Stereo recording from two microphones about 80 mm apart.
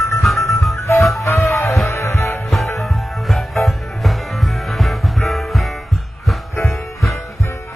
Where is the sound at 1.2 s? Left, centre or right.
Left.